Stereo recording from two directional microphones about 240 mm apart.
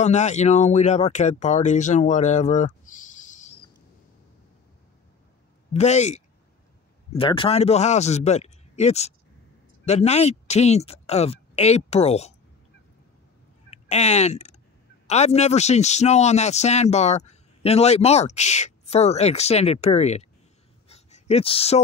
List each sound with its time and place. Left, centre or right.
0.0 s speech: left
5.7 s a man's voice: left
13.7 s a man's voice: left
20.9 s a sound: left